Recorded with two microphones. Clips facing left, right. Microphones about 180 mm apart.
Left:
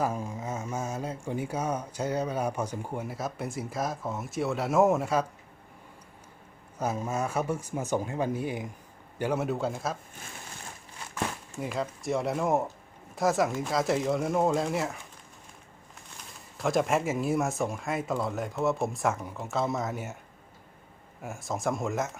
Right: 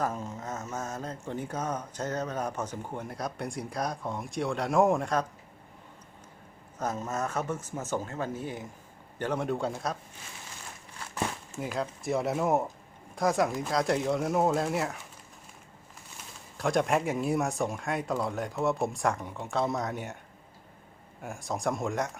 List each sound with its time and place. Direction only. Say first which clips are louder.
0.0 s speech: left 2 dB; 10° left (ahead or behind)
6.7 s speech: left 2 dB; 10° left (ahead or behind)
11.6 s speech: left 1 dB; centre (ahead or behind)
16.6 s speech: even; centre (ahead or behind)
21.2 s speech: even; centre (ahead or behind)